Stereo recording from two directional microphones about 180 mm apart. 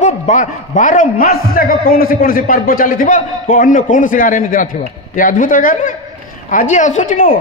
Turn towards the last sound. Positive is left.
turn(degrees=50)  # may be behind; listen again after turning